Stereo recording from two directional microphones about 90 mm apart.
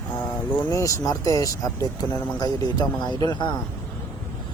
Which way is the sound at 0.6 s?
35° left (ahead or behind).